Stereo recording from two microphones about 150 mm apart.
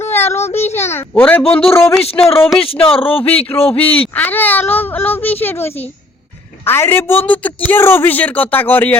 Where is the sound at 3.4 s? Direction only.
10° left (ahead or behind).